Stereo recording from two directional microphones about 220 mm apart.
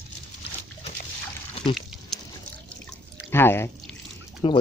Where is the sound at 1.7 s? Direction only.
Centre (ahead or behind).